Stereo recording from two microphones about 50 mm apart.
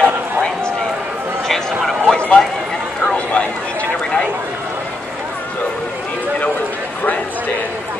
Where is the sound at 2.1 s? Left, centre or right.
Left.